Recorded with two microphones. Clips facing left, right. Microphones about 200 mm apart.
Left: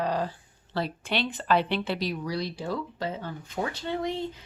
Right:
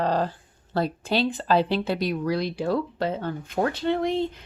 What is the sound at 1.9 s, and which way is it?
Speech, 55° right (ahead or behind).